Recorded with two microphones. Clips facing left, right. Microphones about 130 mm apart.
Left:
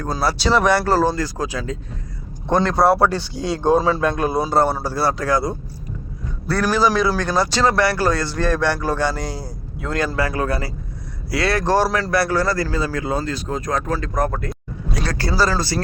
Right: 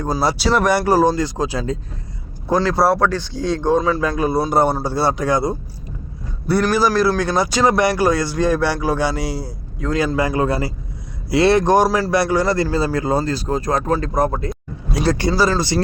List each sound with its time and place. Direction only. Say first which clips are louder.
0.3 s speech: left 2 dB; 5° right (ahead or behind)
1.5 s speech: right 4 dB; 35° right (ahead or behind)
2.6 s speech: left 1 dB; 5° right (ahead or behind)
3.0 s speech: even; 15° left (ahead or behind)
4.0 s speech: right 1 dB; centre (ahead or behind)
4.4 s speech: right 1 dB; 15° right (ahead or behind)
6.7 s speech: right 2 dB; 5° right (ahead or behind)
10.2 s speech: right 3 dB; 20° right (ahead or behind)